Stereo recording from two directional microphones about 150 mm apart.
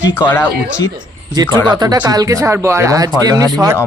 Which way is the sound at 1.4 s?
10° left (ahead or behind).